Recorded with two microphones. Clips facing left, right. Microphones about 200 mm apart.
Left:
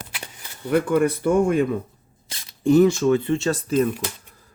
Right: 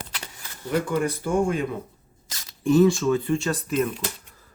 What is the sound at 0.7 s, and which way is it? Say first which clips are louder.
Speech: left 5 dB; 55° left (ahead or behind).